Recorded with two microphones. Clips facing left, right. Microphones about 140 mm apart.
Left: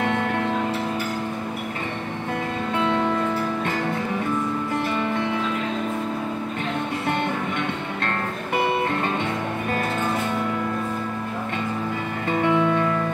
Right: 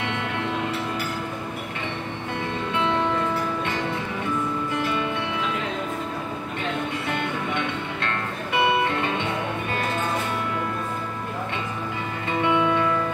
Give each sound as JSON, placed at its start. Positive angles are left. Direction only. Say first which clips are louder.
{"t": 0.0, "sound": "music", "louder": "left 5 dB", "side_deg": 45}
{"t": 12.3, "sound": "music", "louder": "left 2 dB", "side_deg": 40}